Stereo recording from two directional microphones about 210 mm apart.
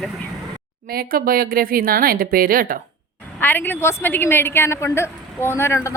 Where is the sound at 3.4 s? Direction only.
10° left (ahead or behind).